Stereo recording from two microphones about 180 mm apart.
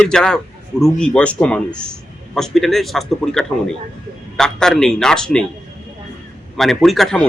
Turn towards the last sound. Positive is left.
turn(degrees=0)  # may be behind; listen again after turning